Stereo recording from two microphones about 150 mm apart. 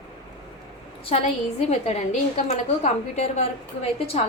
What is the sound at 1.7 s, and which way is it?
A woman's voice, 45° left (ahead or behind).